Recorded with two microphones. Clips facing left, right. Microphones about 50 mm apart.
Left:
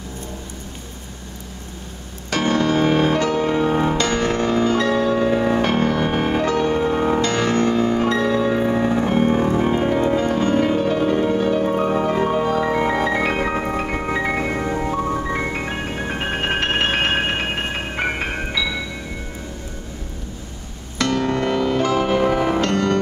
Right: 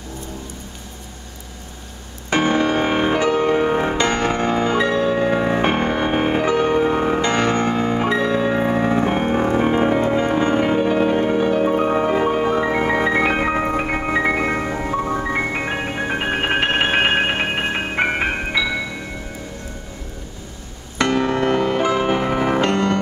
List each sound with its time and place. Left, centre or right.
2.2 s music: right
21.0 s music: right